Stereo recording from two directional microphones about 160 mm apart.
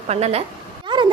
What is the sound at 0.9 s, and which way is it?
Speech, 30° right (ahead or behind).